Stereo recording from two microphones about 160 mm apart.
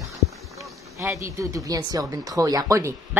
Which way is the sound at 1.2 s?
20° right (ahead or behind).